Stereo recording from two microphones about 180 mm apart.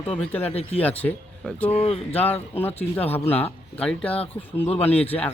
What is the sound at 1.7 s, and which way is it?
Speech, 35° left (ahead or behind).